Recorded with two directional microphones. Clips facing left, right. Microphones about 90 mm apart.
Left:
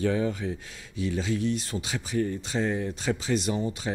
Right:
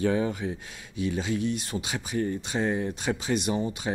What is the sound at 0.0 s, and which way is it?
Speech, 20° right (ahead or behind).